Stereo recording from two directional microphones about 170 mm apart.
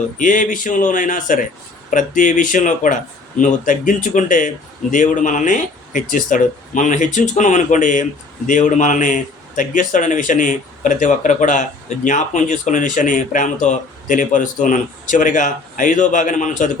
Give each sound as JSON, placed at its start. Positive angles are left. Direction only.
{"t": 0.2, "sound": "speech", "side_deg": 50}